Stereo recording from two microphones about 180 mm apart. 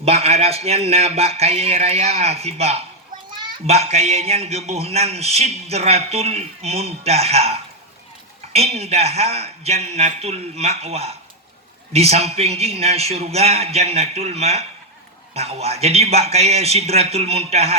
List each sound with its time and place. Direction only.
0.0 s a child's voice: 35° right (ahead or behind)